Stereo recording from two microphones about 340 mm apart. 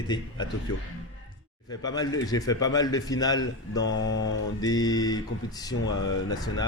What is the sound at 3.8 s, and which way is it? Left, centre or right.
Mantra, left.